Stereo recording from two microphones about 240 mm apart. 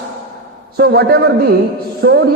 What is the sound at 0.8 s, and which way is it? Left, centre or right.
A man's voice, right.